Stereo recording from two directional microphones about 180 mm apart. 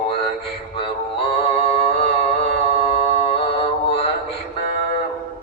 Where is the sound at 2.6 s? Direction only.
35° left (ahead or behind).